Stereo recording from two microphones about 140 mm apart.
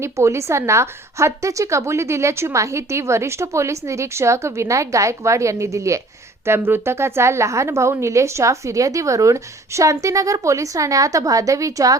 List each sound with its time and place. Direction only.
0.0 s a woman's voice: 20° right (ahead or behind)